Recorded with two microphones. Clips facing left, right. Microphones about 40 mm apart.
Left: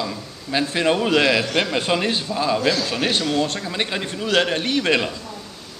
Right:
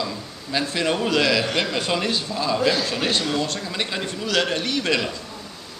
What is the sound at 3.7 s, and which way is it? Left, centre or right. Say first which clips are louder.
Speech: left 2 dB; centre.